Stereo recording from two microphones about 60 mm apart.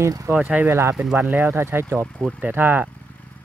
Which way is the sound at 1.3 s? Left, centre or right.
Right.